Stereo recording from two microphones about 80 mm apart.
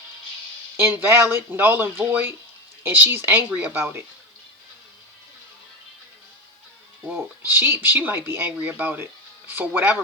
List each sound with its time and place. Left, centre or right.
0.8 s speech: right
7.1 s speech: right